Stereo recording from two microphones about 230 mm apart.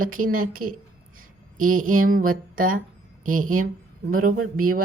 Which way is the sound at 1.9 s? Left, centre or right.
Right.